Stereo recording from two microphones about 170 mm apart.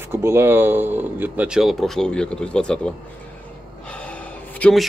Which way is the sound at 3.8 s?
10° left (ahead or behind).